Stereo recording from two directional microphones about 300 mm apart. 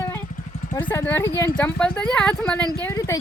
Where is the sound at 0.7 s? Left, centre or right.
Centre.